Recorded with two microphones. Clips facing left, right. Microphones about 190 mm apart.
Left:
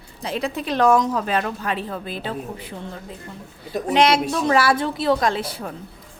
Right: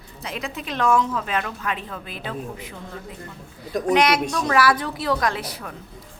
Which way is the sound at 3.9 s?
30° left (ahead or behind).